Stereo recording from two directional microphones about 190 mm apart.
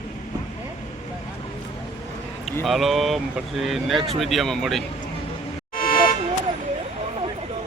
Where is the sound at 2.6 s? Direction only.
Centre (ahead or behind).